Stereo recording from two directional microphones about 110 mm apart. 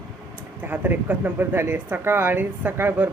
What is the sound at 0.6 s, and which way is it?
Speech, 20° right (ahead or behind).